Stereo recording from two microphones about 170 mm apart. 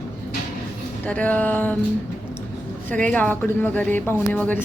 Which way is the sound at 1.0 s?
10° left (ahead or behind).